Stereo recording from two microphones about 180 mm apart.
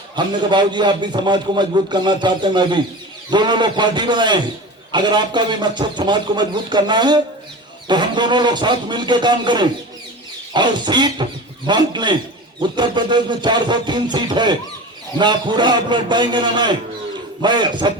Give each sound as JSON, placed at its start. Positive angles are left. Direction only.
{"t": 0.2, "sound": "a man's voice", "side_deg": -25}